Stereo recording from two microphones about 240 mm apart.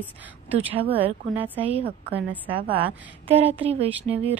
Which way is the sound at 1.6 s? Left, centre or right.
Right.